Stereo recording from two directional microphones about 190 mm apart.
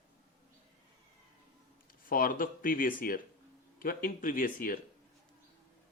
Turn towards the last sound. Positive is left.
turn(degrees=50)  # may be behind; listen again after turning